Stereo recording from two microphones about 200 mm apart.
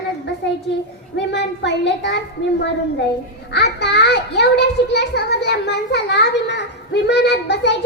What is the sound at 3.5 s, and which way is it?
A child's voice, 60° left (ahead or behind).